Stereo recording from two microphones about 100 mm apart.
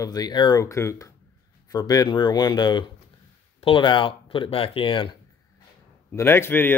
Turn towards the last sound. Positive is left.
turn(degrees=20)  # may be behind; listen again after turning